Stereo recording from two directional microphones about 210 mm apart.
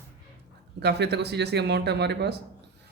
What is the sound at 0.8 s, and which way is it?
Speech, 50° right (ahead or behind).